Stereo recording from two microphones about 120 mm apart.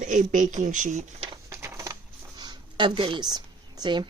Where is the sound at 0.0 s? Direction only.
90° right.